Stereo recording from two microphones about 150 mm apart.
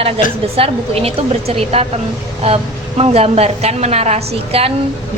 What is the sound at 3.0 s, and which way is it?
A woman's voice, 40° right (ahead or behind).